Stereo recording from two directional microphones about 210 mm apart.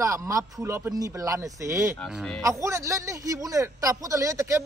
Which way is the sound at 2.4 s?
15° right (ahead or behind).